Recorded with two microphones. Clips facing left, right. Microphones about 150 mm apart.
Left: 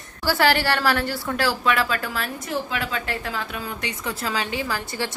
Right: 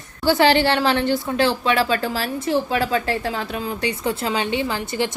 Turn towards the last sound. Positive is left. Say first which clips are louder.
# right 5 dB
turn(degrees=-20)  # may be behind; listen again after turning